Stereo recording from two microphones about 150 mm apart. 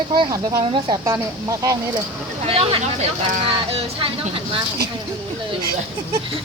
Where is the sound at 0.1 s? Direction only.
30° right (ahead or behind).